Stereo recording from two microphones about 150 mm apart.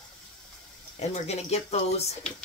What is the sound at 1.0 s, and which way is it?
Speech, 45° left (ahead or behind).